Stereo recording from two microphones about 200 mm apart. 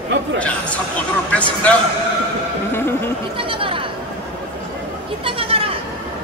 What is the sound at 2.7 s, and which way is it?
Speech, 10° left (ahead or behind).